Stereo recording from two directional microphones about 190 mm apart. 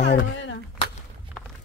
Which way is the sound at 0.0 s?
70° left (ahead or behind).